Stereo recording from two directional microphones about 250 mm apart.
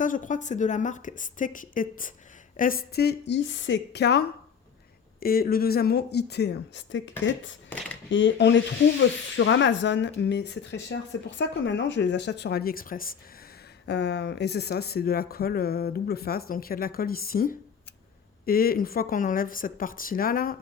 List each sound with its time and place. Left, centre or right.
0.0 s speech: left
5.2 s speech: left
8.1 s snake: left
13.8 s speech: left